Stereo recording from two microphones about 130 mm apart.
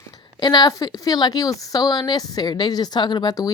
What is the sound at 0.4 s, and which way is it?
A woman's voice, 30° left (ahead or behind).